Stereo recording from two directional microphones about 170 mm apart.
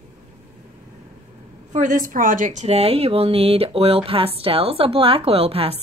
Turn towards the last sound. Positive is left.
turn(degrees=-35)  # may be behind; listen again after turning